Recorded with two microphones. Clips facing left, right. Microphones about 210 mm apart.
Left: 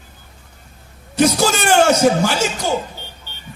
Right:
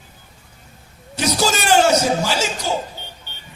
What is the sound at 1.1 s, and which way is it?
A man's voice, 55° left (ahead or behind).